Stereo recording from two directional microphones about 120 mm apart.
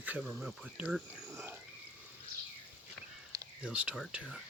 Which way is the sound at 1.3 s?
20° right (ahead or behind).